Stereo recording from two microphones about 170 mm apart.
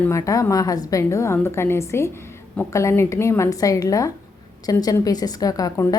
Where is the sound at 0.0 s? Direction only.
15° left (ahead or behind).